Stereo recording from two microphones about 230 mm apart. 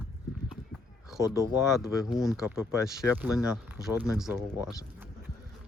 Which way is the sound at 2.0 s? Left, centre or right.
Centre.